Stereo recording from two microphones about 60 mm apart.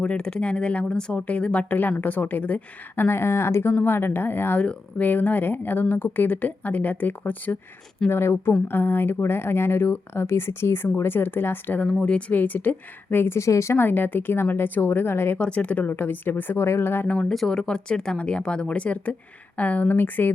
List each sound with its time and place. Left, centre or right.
0.0 s speech: centre
8.1 s speech: left
11.8 s speech: left
12.3 s speech: left
13.7 s speech: left
15.4 s speech: centre
15.9 s speech: left
17.2 s speech: centre; by 20.3 s left